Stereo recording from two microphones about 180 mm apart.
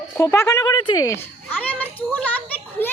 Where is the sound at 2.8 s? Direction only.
10° left (ahead or behind).